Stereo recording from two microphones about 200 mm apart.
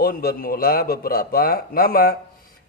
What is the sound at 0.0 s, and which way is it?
A man's voice, 50° left (ahead or behind).